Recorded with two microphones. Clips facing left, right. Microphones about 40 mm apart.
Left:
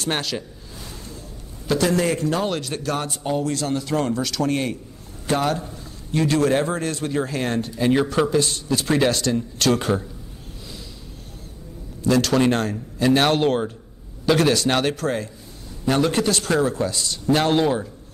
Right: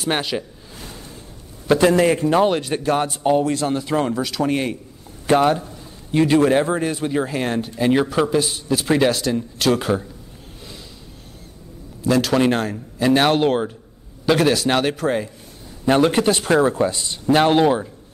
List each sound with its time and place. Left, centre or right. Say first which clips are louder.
0.0 s a man's voice: right 3 dB; centre
1.7 s a man's voice: right 5 dB; right; by 10.0 s centre
12.0 s a man's voice: right 1 dB; centre
15.8 s a man's voice: right 4 dB; right